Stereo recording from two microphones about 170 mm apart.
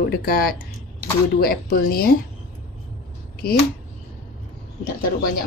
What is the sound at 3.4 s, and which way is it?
Speech, 65° left (ahead or behind).